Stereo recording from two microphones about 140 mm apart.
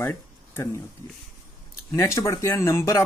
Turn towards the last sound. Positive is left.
turn(degrees=20)  # may be behind; listen again after turning